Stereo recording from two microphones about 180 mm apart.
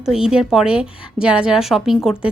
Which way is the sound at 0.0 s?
5° right (ahead or behind).